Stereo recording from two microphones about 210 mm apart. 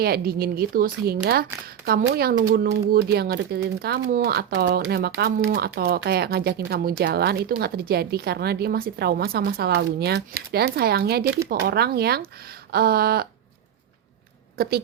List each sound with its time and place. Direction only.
0.0 s speech: 45° right (ahead or behind)